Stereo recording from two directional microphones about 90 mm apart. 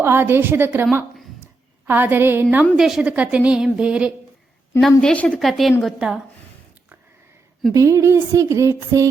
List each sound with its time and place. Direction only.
0.0 s a woman's voice: 25° right (ahead or behind)
1.9 s a woman's voice: 20° right (ahead or behind)
2.7 s a woman's voice: 5° right (ahead or behind)
4.8 s a woman's voice: 5° left (ahead or behind)
5.1 s a woman's voice: 15° left (ahead or behind)
5.4 s a woman's voice: centre (ahead or behind)
7.7 s speech: 35° right (ahead or behind)